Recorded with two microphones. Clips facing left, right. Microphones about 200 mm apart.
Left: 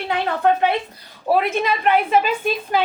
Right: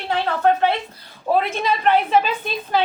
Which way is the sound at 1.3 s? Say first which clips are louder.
Left 1 dB; 5° left (ahead or behind).